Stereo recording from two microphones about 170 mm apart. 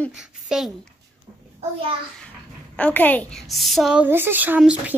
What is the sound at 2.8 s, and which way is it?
A woman's voice, 10° left (ahead or behind).